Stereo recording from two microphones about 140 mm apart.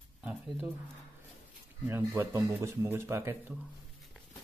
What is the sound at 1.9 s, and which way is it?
Speech, 15° right (ahead or behind).